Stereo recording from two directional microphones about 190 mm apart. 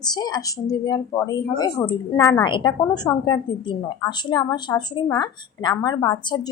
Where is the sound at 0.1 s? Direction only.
20° left (ahead or behind).